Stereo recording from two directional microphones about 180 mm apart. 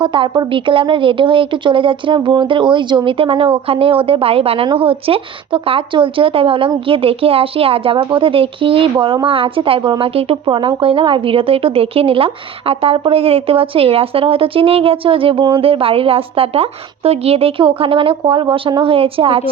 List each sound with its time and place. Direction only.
0.0 s a woman's voice: 25° right (ahead or behind)